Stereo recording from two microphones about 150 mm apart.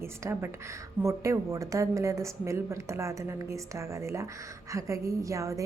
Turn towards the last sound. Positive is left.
turn(degrees=-20)  # may be behind; listen again after turning